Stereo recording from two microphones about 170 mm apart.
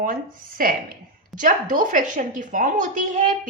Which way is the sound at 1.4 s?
50° right (ahead or behind).